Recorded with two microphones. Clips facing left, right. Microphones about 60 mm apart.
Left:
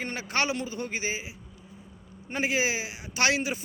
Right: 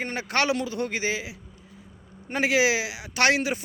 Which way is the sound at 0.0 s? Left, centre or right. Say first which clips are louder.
Right 3 dB; right.